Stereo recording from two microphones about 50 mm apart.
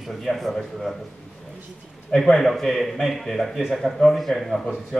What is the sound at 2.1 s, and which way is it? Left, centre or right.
A man's voice, centre.